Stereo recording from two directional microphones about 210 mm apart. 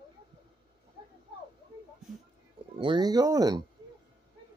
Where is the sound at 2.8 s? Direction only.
20° right (ahead or behind).